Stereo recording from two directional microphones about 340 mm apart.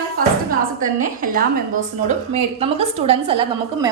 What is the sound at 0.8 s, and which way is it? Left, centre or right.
A woman's voice, right.